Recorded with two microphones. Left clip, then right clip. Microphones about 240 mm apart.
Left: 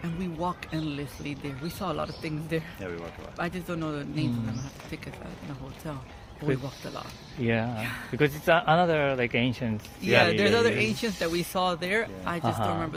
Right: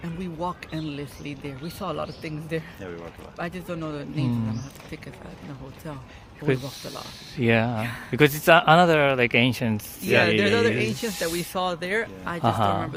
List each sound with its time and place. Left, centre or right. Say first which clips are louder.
0.0 s speech: right 1 dB; centre
6.4 s speech: right 4 dB; right
7.8 s speech: right 3 dB; centre
8.1 s speech: right 6 dB; right
10.2 s speech: right 2 dB; centre
12.4 s speech: right 7 dB; right